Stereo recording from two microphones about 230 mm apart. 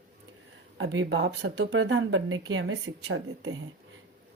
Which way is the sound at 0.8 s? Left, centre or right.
Right.